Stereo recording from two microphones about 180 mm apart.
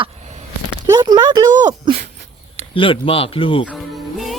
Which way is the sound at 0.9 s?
20° right (ahead or behind).